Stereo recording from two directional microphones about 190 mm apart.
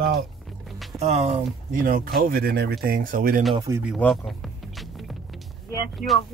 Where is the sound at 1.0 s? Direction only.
35° right (ahead or behind).